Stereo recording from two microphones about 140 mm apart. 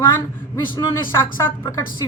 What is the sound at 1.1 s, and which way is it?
Speech, 15° left (ahead or behind).